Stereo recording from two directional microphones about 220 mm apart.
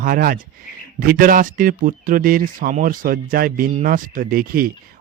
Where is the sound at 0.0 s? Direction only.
40° right (ahead or behind).